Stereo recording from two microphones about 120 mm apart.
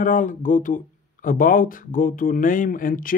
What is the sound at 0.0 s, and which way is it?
Speech, 90° left.